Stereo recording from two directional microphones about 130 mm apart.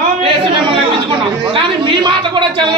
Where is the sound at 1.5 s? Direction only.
40° right (ahead or behind).